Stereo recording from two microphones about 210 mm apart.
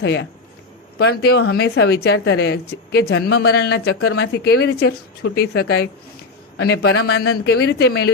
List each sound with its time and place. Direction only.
0.0 s a woman's voice: 55° left (ahead or behind)